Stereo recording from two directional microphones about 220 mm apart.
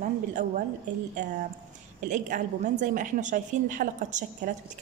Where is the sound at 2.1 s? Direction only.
35° right (ahead or behind).